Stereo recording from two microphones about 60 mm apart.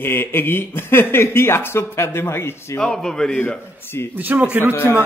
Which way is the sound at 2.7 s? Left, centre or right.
Centre.